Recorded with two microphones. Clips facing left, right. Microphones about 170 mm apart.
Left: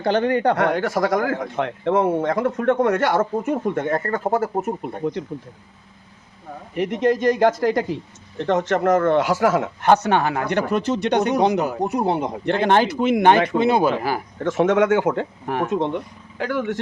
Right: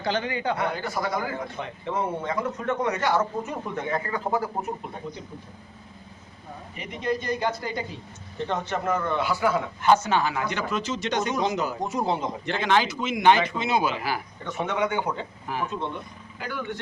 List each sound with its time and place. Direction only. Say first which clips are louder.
0.0 s speech: left 9 dB; 55° left (ahead or behind)
6.7 s speech: left 9 dB; 80° left; by 14.2 s 50° left (ahead or behind)
14.3 s speech: left 14 dB; 90° left